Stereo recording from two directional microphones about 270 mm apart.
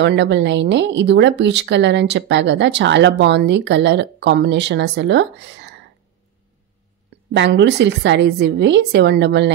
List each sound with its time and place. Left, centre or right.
0.0 s speech: right
7.3 s speech: right